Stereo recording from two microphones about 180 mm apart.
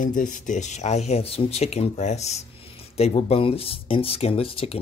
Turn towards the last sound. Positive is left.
turn(degrees=30)  # may be behind; listen again after turning